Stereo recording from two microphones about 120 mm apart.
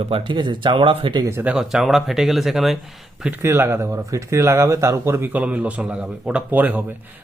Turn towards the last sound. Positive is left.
turn(degrees=-15)  # may be behind; listen again after turning